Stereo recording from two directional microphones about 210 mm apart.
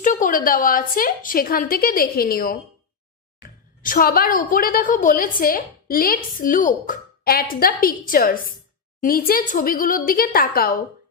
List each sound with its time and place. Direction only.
0.0 s a woman's voice: 40° left (ahead or behind)
3.8 s a woman's voice: 40° left (ahead or behind)